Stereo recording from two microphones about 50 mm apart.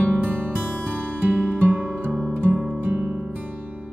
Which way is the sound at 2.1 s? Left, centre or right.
Centre.